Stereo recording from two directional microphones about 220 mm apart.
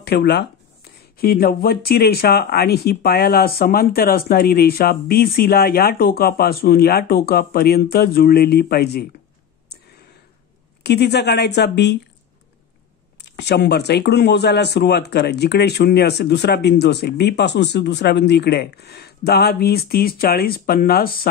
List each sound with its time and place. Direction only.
0.0 s speech: 45° left (ahead or behind)
10.8 s speech: 50° left (ahead or behind)
13.2 s speech: 50° left (ahead or behind)